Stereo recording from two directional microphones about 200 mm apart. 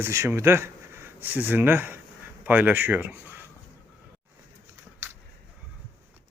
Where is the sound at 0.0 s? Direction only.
15° right (ahead or behind).